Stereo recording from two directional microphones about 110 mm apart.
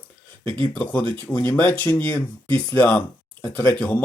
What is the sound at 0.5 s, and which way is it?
Speech, 15° left (ahead or behind).